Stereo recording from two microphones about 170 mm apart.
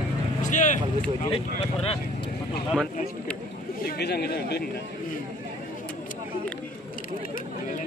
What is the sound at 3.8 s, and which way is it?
Speech, 70° left (ahead or behind).